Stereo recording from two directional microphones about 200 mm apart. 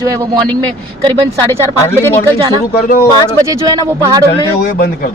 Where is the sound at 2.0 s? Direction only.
10° left (ahead or behind).